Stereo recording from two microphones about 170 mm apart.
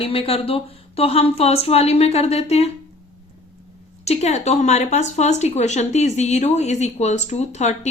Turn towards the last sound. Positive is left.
turn(degrees=40)  # may be behind; listen again after turning